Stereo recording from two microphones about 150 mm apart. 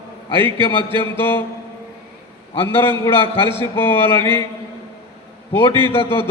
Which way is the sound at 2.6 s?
15° left (ahead or behind).